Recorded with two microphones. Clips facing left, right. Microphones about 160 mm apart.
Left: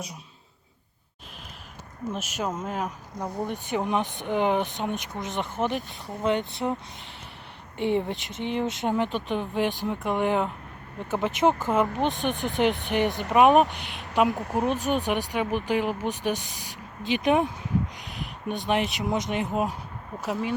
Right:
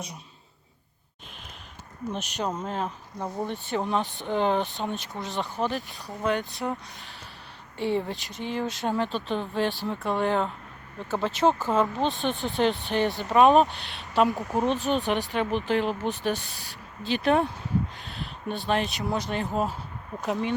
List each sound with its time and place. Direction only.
2.1 s speech: 5° left (ahead or behind)
20.2 s speech: 5° left (ahead or behind)